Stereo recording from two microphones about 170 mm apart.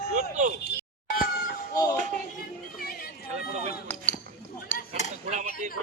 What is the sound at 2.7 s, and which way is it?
Chatter, 60° left (ahead or behind).